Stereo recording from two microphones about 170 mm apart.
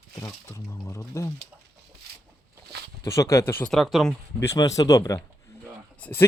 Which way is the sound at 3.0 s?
15° left (ahead or behind).